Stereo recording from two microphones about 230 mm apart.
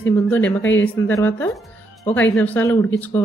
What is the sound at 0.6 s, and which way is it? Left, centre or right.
Speech, left.